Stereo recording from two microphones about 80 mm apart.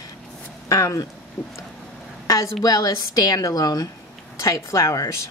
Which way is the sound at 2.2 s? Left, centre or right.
Left.